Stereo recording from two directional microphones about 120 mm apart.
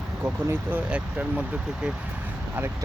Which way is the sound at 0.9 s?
10° right (ahead or behind).